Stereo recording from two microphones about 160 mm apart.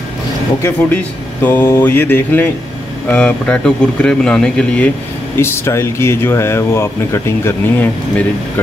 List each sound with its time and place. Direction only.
0.6 s speech: 15° left (ahead or behind)